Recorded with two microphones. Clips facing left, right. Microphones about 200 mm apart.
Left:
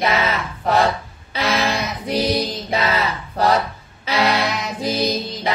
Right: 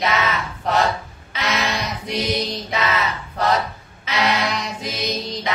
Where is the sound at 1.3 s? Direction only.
30° left (ahead or behind).